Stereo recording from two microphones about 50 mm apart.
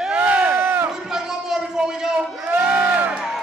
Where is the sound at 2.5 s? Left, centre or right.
Right.